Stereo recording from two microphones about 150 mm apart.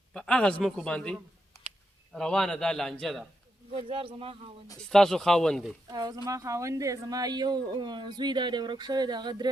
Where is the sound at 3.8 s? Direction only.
40° right (ahead or behind).